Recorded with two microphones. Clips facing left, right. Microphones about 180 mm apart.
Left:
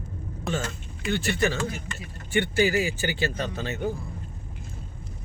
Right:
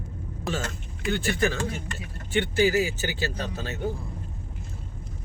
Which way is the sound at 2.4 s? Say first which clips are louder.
Right 1 dB; 50° left (ahead or behind).